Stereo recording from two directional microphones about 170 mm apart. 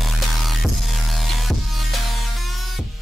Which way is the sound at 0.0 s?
Centre (ahead or behind).